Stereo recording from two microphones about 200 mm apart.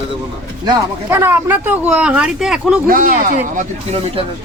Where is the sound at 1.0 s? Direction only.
10° right (ahead or behind).